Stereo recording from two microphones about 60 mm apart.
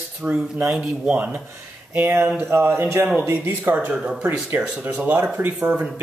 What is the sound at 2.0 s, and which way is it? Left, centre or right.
Speech, right.